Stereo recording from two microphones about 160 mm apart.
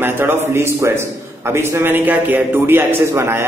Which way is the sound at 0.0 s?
15° right (ahead or behind).